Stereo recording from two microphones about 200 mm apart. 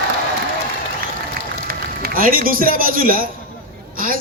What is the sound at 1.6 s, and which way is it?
A man's voice, 45° right (ahead or behind).